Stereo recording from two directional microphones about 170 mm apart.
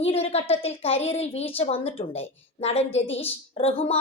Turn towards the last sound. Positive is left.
turn(degrees=35)  # may be behind; listen again after turning